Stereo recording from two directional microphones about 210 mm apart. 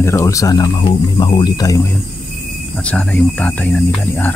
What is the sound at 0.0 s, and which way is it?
Speech, 15° left (ahead or behind).